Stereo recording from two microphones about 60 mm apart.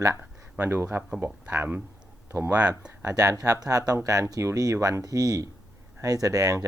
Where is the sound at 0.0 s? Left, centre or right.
Right.